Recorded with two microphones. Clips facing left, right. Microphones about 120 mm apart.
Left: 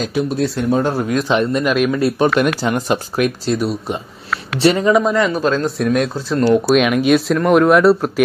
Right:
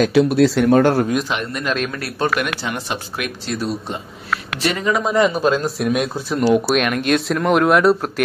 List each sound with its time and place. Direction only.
0.0 s speech: 75° right (ahead or behind)
1.3 s speech: 30° left (ahead or behind)
1.6 s speech: 10° left (ahead or behind)
2.0 s speech: 20° left (ahead or behind)
2.6 s speech: 40° left (ahead or behind)
4.6 s speech: 30° left (ahead or behind)
5.1 s speech: 15° right (ahead or behind); by 8.1 s centre (ahead or behind)